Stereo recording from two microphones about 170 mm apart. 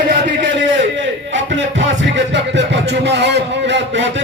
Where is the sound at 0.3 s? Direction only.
90° right.